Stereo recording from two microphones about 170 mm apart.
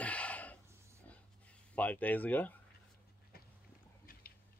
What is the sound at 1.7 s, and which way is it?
Speech, 10° left (ahead or behind).